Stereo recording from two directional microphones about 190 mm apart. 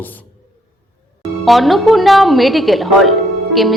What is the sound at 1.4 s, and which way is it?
A woman's voice, centre (ahead or behind).